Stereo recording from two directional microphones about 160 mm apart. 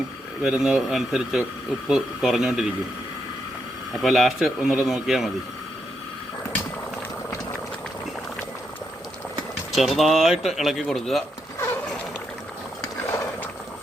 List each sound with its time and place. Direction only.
0.4 s speech: 5° right (ahead or behind)
4.0 s speech: centre (ahead or behind)
9.7 s speech: centre (ahead or behind)
12.8 s ratchet: 15° left (ahead or behind)